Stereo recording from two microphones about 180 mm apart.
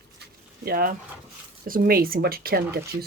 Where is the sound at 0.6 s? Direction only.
55° right (ahead or behind).